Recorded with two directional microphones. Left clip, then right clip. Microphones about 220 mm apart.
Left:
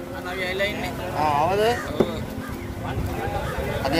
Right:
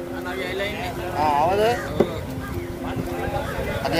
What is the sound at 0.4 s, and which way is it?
Vehicle, 45° left (ahead or behind).